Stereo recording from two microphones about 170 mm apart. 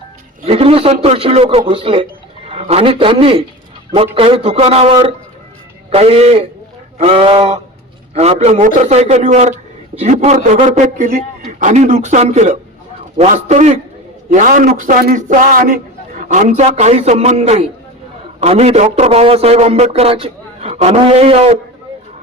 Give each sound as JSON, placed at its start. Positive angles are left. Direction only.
{"t": 0.4, "sound": "a man's voice", "side_deg": -35}